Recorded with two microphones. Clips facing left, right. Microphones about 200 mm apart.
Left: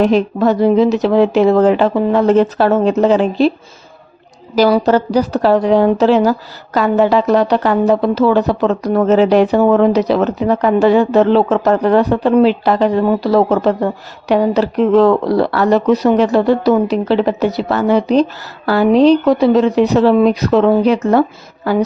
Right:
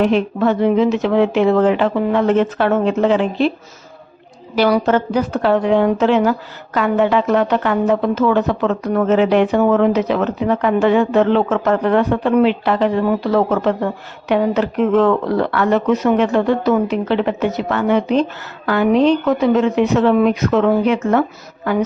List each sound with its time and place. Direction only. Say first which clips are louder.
0.0 s a woman's voice: left 3 dB; 35° left (ahead or behind)
4.5 s a woman's voice: left 3 dB; 40° left (ahead or behind)